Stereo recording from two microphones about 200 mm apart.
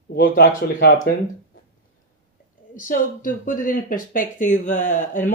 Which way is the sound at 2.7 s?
40° left (ahead or behind).